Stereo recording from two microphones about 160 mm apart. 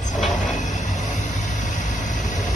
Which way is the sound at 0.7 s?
50° left (ahead or behind).